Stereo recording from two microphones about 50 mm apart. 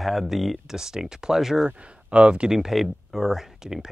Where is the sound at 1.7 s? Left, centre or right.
Right.